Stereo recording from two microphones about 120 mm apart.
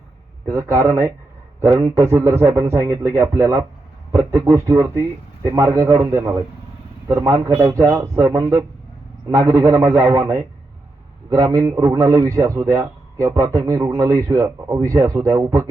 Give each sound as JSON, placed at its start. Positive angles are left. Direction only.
{"t": 0.4, "sound": "a man's voice", "side_deg": -25}